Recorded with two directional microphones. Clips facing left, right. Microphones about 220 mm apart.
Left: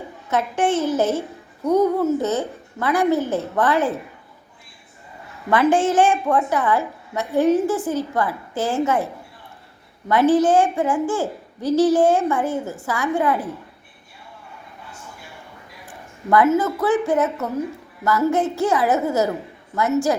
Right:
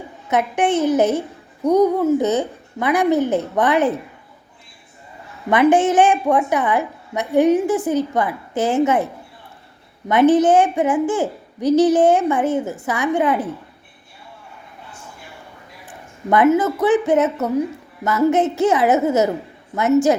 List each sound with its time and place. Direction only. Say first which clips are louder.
0.3 s a woman's voice: right 2 dB; 15° right (ahead or behind)
5.5 s a woman's voice: right 3 dB; 20° right (ahead or behind)
10.1 s a child's voice: right 3 dB; 20° right (ahead or behind)
16.3 s a child's voice: right 2 dB; 20° right (ahead or behind)